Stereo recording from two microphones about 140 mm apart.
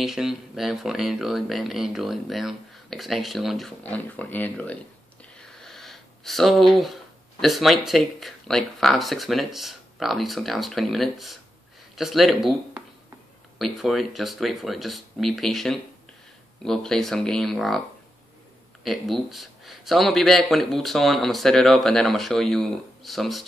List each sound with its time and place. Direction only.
0.0 s speech: 5° right (ahead or behind)
3.8 s speech: 10° left (ahead or behind)
13.6 s speech: centre (ahead or behind)
18.9 s speech: centre (ahead or behind)